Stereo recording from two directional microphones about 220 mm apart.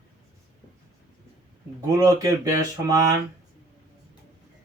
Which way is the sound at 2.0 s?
15° right (ahead or behind).